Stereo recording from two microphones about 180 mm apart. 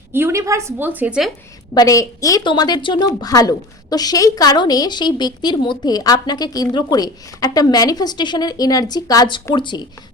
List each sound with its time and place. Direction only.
0.1 s a woman's voice: 15° right (ahead or behind)
1.7 s a woman's voice: 20° left (ahead or behind)